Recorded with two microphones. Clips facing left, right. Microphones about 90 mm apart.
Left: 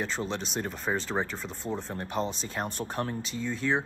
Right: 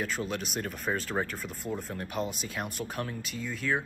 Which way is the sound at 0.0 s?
30° left (ahead or behind).